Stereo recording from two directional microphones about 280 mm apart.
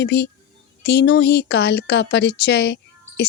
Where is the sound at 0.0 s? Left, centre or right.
Left.